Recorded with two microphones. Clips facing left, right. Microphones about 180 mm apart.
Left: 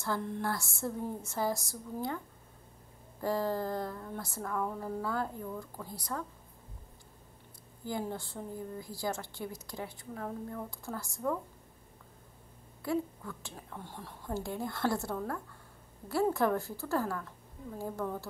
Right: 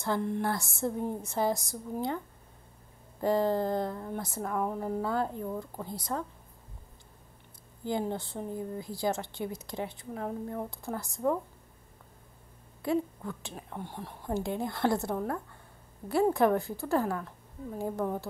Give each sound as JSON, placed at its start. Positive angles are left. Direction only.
{"t": 0.0, "sound": "a woman's voice", "side_deg": -20}
{"t": 3.2, "sound": "a woman's voice", "side_deg": -20}
{"t": 7.8, "sound": "a woman's voice", "side_deg": -25}
{"t": 12.8, "sound": "a woman's voice", "side_deg": -25}